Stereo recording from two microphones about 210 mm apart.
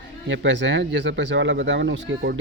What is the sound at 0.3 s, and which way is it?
Speech, 60° right (ahead or behind).